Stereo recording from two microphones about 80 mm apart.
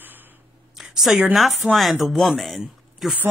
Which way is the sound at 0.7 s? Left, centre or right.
Centre.